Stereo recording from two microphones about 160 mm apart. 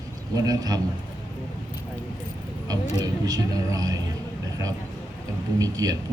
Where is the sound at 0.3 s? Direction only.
20° right (ahead or behind).